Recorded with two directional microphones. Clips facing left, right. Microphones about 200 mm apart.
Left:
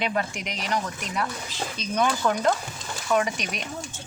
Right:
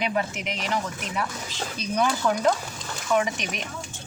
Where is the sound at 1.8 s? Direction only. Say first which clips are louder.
Even; 10° right (ahead or behind).